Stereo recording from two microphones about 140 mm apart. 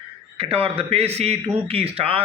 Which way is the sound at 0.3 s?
45° right (ahead or behind).